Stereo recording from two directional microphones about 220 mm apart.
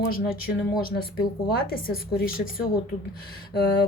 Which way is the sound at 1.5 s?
45° left (ahead or behind).